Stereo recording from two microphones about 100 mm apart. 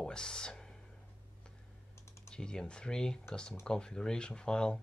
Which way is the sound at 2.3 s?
5° left (ahead or behind).